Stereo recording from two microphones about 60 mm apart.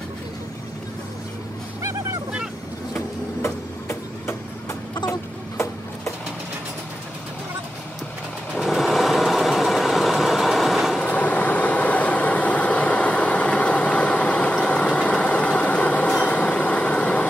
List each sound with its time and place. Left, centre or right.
8.5 s vehicle: centre
11.1 s vehicle: left